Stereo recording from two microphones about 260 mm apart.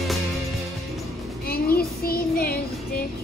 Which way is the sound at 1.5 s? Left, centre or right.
Left.